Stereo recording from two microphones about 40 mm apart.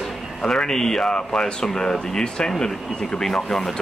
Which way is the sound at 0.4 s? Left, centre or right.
Centre.